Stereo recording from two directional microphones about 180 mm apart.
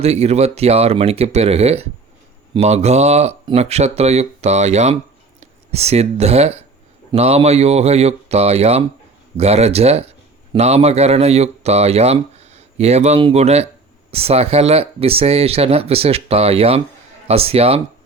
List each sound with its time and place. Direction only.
0.0 s a man's voice: 35° right (ahead or behind)